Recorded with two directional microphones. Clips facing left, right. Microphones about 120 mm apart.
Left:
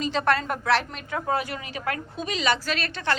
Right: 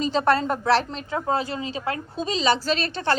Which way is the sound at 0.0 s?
35° right (ahead or behind).